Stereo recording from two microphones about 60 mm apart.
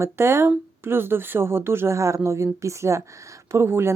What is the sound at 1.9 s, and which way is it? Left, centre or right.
Speech, right.